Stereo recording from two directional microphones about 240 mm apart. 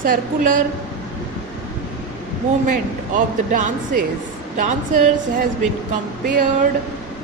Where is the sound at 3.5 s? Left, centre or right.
Right.